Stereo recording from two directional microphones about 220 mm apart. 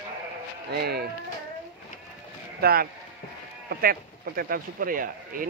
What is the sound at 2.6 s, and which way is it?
Speech, 45° right (ahead or behind).